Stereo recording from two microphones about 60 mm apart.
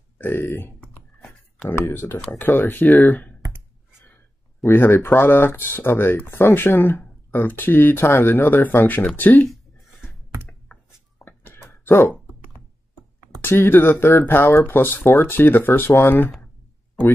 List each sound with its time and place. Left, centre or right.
0.2 s speech: left
1.8 s speech: left
2.3 s speech: left
4.6 s speech: left
11.1 s a sound: left
13.4 s speech: left